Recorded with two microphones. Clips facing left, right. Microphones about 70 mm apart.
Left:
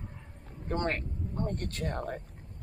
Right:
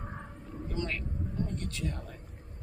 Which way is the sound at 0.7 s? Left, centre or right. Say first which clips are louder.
Left 5 dB; left.